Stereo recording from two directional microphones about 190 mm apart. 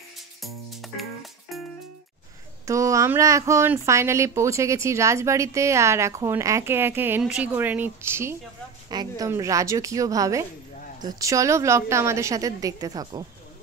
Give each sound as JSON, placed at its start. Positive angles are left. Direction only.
{"t": 0.4, "sound": "music", "side_deg": 0}
{"t": 2.6, "sound": "speech", "side_deg": -15}